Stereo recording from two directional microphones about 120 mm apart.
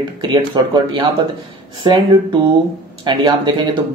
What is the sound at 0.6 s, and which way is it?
Speech, 35° right (ahead or behind).